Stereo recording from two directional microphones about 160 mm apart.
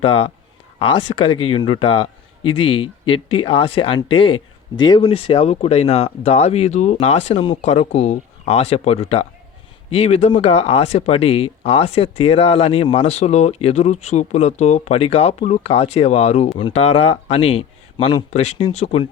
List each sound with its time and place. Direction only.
0.0 s speech: 35° left (ahead or behind)
5.0 s speech: 35° left (ahead or behind)
18.3 s speech: 45° left (ahead or behind)